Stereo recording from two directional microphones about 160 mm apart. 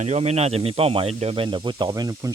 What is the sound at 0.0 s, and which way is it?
Speech, 45° right (ahead or behind).